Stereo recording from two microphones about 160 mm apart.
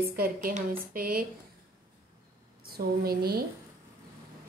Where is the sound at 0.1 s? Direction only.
65° right (ahead or behind).